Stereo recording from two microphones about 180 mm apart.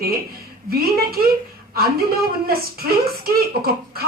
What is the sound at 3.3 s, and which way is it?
Speech, 55° right (ahead or behind).